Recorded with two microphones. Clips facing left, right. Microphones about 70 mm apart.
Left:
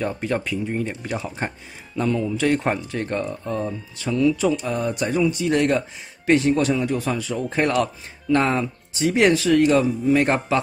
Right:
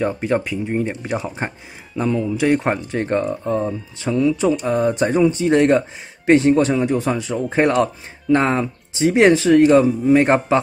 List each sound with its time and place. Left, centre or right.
0.1 s speech: centre